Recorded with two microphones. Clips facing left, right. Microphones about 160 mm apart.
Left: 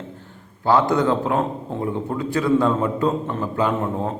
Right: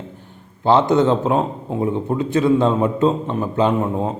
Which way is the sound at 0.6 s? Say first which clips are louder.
Right 3 dB; 20° right (ahead or behind).